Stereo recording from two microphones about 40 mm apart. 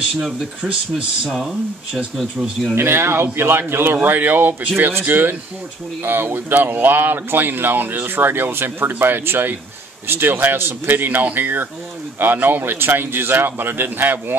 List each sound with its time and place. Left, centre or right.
2.7 s a man's voice: right
10.3 s speech: right
10.6 s speech: right